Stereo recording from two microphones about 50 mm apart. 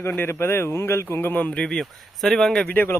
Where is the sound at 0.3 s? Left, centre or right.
Left.